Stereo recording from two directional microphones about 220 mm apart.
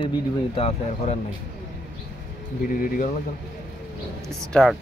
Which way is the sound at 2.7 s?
40° left (ahead or behind).